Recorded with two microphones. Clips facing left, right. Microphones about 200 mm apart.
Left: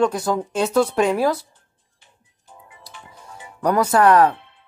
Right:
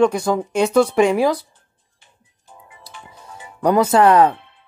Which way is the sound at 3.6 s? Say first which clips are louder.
Right 2 dB; 20° right (ahead or behind).